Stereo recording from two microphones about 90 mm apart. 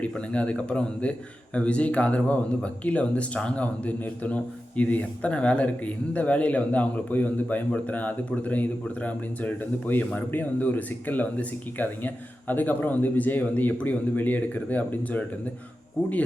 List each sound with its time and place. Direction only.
0.0 s speech: 15° left (ahead or behind)